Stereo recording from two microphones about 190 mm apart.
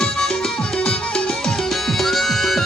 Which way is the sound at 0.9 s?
5° left (ahead or behind).